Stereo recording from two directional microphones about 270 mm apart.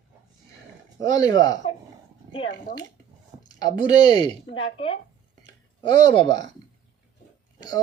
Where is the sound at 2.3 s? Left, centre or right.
Left.